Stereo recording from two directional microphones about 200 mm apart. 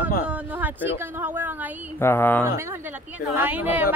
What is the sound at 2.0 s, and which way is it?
Speech, 10° left (ahead or behind).